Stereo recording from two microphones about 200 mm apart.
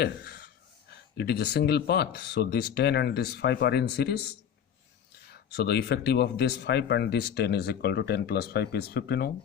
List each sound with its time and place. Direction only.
0.0 s a sound: 55° left (ahead or behind)
1.1 s speech: 55° left (ahead or behind)
5.3 s speech: 55° left (ahead or behind)